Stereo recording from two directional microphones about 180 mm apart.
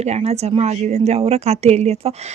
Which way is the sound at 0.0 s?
35° right (ahead or behind).